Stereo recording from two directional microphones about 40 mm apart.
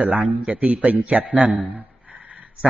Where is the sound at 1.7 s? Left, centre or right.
Right.